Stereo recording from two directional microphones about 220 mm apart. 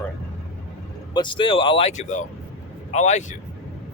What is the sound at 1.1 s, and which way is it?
A man's voice, 20° left (ahead or behind).